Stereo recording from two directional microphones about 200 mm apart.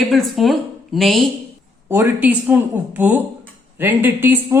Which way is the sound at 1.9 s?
10° right (ahead or behind).